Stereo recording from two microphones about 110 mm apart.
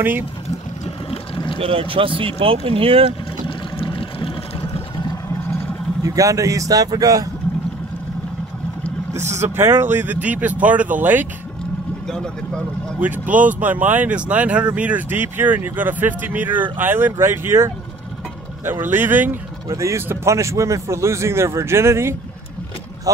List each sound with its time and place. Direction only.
0.8 s boat: 60° left (ahead or behind)
1.6 s speech: 60° right (ahead or behind)
3.1 s boat: 55° left (ahead or behind)
6.0 s speech: 30° right (ahead or behind)
9.1 s speech: 25° right (ahead or behind)
12.1 s speech: 5° left (ahead or behind)
13.0 s speech: 15° right (ahead or behind)
19.7 s speech: 30° right (ahead or behind)